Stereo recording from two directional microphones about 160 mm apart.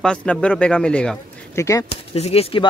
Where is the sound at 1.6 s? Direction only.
20° left (ahead or behind).